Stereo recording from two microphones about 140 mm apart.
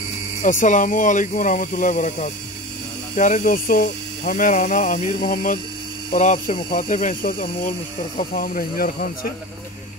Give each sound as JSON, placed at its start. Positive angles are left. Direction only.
{"t": 0.4, "sound": "speech", "side_deg": 65}
{"t": 6.1, "sound": "speech", "side_deg": 60}
{"t": 8.2, "sound": "speech", "side_deg": 90}